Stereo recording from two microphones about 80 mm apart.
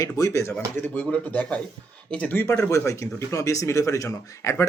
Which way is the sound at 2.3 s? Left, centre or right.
Left.